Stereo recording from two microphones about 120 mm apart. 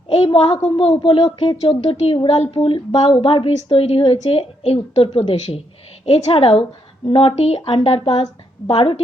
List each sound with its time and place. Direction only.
0.1 s a woman's voice: 55° left (ahead or behind)